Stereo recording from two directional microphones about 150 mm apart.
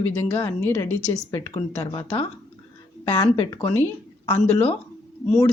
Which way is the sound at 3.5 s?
25° left (ahead or behind).